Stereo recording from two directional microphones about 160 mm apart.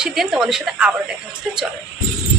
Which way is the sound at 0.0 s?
5° right (ahead or behind).